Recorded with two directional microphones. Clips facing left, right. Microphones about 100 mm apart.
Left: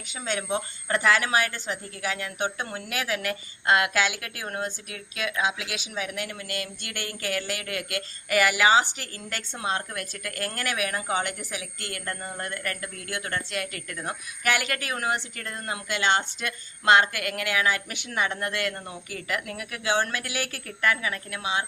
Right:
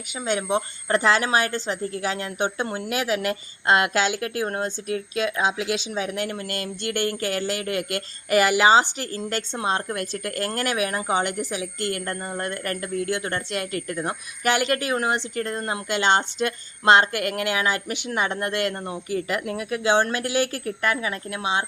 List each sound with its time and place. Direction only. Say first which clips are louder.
0.1 s speech: right 5 dB; 15° right (ahead or behind)